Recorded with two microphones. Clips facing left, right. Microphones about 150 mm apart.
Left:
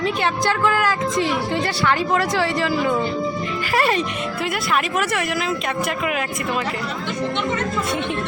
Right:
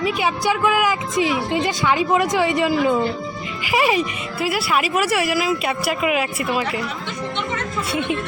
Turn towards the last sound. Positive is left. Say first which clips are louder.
# right 2 dB
turn(degrees=-5)  # may be behind; listen again after turning